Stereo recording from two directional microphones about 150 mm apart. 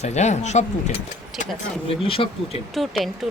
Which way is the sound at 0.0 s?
50° left (ahead or behind).